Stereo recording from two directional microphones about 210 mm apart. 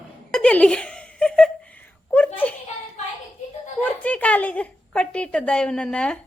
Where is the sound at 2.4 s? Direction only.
10° left (ahead or behind).